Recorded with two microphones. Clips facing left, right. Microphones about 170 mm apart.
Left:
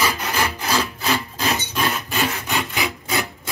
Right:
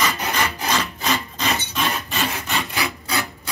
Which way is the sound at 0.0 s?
5° left (ahead or behind).